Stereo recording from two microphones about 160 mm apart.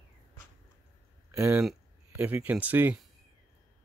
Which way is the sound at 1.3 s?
15° right (ahead or behind).